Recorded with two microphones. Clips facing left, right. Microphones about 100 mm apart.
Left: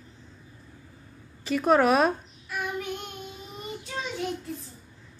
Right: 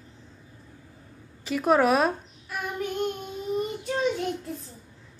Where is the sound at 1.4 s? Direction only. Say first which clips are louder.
Even; 5° right (ahead or behind).